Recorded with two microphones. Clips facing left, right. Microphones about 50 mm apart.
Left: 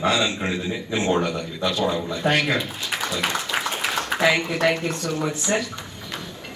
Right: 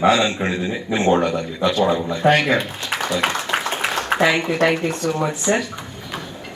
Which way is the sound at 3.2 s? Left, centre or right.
Right.